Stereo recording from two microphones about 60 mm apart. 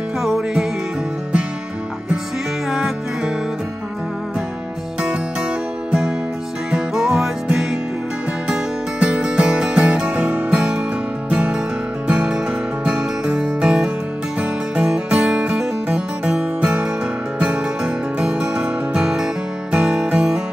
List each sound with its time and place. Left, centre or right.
0.2 s music: centre
5.9 s music: centre
9.0 s music: centre